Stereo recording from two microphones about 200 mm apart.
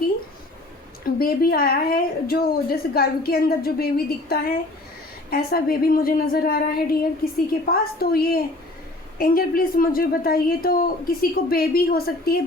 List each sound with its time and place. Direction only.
1.2 s a woman's voice: 50° left (ahead or behind)